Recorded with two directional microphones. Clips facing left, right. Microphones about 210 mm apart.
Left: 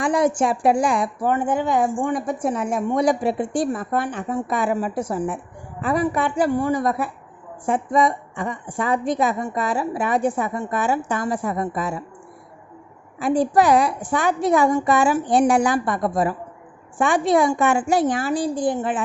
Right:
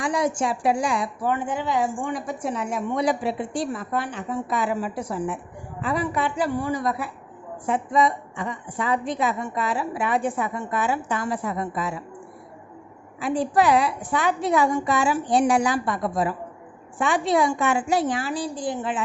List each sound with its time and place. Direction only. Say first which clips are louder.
0.0 s a woman's voice: left 5 dB; 55° left (ahead or behind)
13.1 s a woman's voice: left 4 dB; 45° left (ahead or behind)